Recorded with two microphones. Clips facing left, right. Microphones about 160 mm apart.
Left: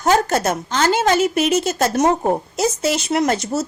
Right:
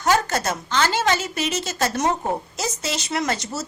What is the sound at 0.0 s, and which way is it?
A woman's voice, 50° left (ahead or behind).